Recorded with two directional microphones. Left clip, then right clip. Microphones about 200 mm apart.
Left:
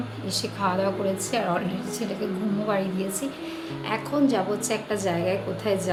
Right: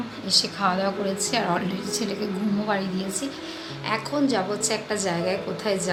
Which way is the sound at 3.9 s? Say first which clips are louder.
Even; 5° left (ahead or behind).